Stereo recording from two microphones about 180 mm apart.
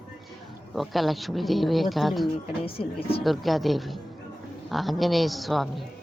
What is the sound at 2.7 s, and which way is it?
Speech, 30° left (ahead or behind).